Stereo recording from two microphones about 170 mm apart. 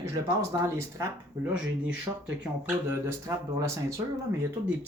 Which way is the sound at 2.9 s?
20° right (ahead or behind).